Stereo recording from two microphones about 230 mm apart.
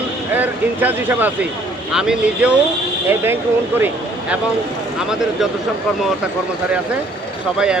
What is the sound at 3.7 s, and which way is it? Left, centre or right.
Speech, centre.